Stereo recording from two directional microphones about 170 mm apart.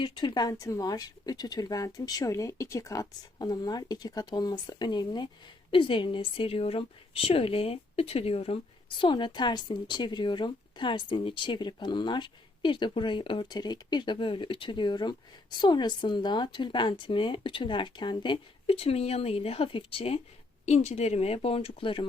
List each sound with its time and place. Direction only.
0.0 s a woman's voice: 25° left (ahead or behind)